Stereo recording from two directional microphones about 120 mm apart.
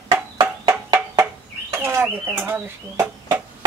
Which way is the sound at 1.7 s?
20° right (ahead or behind).